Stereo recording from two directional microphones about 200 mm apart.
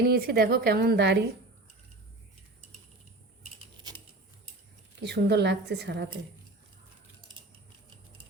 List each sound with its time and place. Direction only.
0.0 s a woman's voice: 50° right (ahead or behind)
4.9 s a woman's voice: 60° right (ahead or behind)